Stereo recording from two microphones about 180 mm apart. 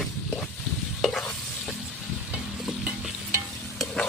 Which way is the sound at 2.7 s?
5° right (ahead or behind).